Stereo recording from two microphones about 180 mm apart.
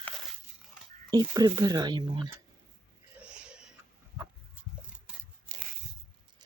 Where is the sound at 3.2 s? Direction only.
5° right (ahead or behind).